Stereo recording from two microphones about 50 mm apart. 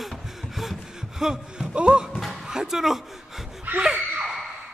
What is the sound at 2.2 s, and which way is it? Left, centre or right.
Music, centre.